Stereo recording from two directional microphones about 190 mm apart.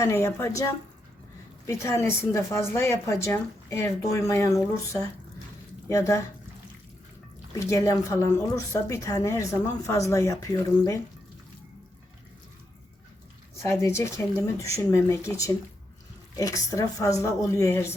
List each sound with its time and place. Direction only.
0.0 s a woman's voice: 15° left (ahead or behind)
7.6 s a woman's voice: 15° left (ahead or behind)
13.6 s a woman's voice: 15° left (ahead or behind)